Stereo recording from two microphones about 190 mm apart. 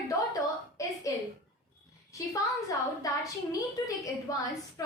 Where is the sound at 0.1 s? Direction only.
15° left (ahead or behind).